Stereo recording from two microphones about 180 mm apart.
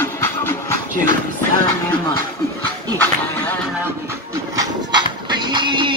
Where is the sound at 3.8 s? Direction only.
15° right (ahead or behind).